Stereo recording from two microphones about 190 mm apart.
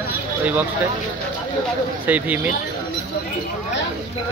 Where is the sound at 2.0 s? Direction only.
10° right (ahead or behind).